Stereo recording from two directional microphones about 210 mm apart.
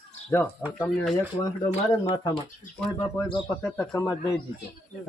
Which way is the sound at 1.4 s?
15° left (ahead or behind).